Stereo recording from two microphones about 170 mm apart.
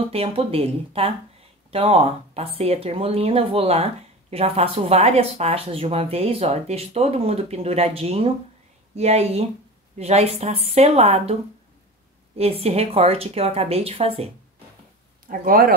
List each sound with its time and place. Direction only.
0.1 s speech: 35° right (ahead or behind)
12.4 s speech: 35° right (ahead or behind)
15.2 s speech: 55° right (ahead or behind)